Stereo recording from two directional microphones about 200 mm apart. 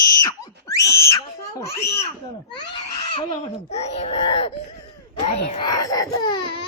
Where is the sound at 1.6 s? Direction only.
15° left (ahead or behind).